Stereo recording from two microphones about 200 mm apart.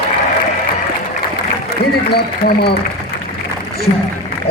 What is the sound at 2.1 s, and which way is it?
Speech, 55° left (ahead or behind).